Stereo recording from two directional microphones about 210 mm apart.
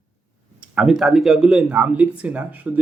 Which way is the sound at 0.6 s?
5° right (ahead or behind).